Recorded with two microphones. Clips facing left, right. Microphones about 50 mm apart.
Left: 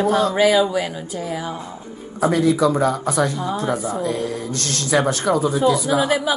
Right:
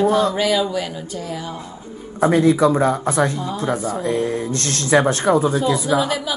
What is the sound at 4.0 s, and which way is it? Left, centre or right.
Speech, right.